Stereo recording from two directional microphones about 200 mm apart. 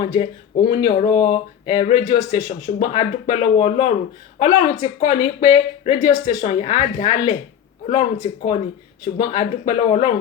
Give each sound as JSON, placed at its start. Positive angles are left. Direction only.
{"t": 0.0, "sound": "speech", "side_deg": 25}